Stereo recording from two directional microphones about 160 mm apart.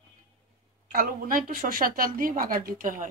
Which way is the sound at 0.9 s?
60° right (ahead or behind).